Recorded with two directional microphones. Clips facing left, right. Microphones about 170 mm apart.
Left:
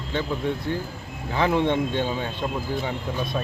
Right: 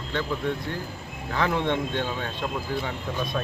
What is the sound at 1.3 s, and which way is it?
Speech, 15° left (ahead or behind).